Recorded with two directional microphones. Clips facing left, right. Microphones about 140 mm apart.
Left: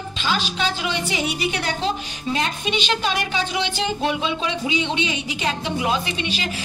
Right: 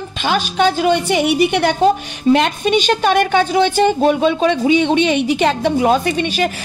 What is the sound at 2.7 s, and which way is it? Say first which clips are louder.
A woman's voice: right 10 dB; 50° right (ahead or behind).